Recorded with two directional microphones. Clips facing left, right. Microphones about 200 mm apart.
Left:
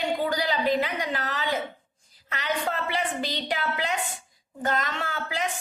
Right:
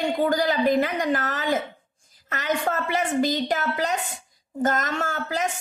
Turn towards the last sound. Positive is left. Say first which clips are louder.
# right 4 dB
turn(degrees=-45)  # may be behind; listen again after turning